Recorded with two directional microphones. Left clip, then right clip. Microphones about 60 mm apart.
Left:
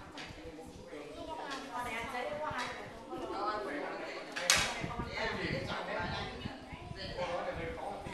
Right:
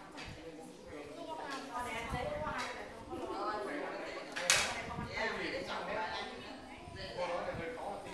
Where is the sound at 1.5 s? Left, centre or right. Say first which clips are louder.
Left 1 dB; centre.